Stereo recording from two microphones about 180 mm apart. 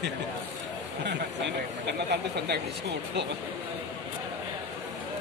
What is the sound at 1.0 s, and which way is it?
Speech, 75° right (ahead or behind).